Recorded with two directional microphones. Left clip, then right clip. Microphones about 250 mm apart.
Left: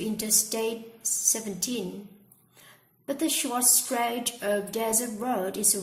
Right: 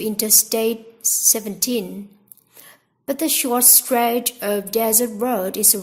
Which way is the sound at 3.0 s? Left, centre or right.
Right.